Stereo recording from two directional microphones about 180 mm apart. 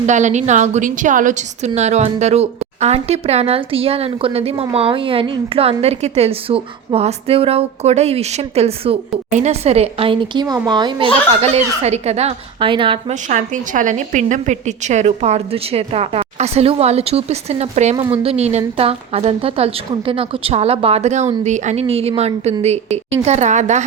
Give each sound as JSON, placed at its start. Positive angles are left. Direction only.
{"t": 0.0, "sound": "a woman's voice", "side_deg": -40}
{"t": 13.2, "sound": "a woman's voice", "side_deg": -45}
{"t": 17.9, "sound": "speech", "side_deg": -15}
{"t": 18.2, "sound": "a woman's voice", "side_deg": -35}